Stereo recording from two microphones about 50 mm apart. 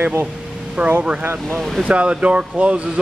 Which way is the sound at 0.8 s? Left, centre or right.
Right.